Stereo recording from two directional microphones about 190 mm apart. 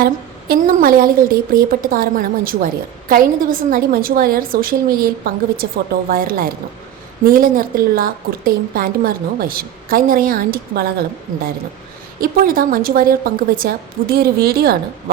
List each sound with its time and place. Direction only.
0.0 s a woman's voice: 50° right (ahead or behind)
12.2 s a woman's voice: 50° right (ahead or behind)